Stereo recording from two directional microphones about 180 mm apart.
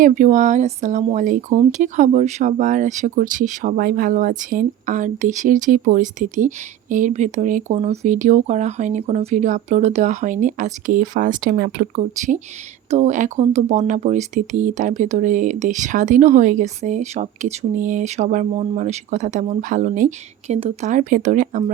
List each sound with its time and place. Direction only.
0.0 s speech: 45° right (ahead or behind)